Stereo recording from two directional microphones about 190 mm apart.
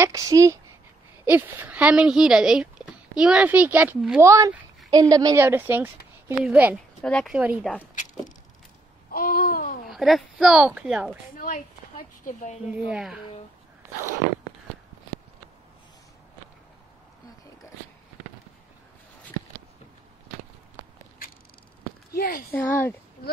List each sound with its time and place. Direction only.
0.0 s a woman's voice: 15° right (ahead or behind)
7.0 s a woman's voice: 5° left (ahead or behind)
7.9 s vehicle: 40° left (ahead or behind)
9.1 s a sound: 50° left (ahead or behind)
9.8 s a woman's voice: centre (ahead or behind)
11.3 s a sound: 45° left (ahead or behind)
12.3 s a woman's voice: 40° left (ahead or behind)
12.7 s a woman's voice: 5° right (ahead or behind)
22.1 s speech: 50° left (ahead or behind)
22.5 s speech: 10° left (ahead or behind)